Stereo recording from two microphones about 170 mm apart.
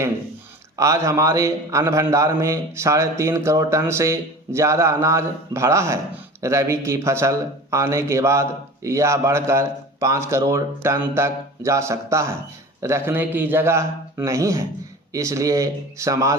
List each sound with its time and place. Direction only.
0.8 s speech: 20° right (ahead or behind)